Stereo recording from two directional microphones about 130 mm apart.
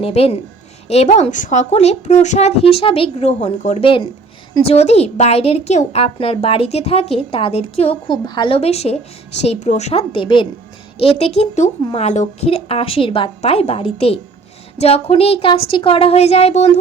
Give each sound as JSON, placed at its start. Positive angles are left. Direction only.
{"t": 0.0, "sound": "a woman's voice", "side_deg": 50}
{"t": 0.9, "sound": "a woman's voice", "side_deg": 60}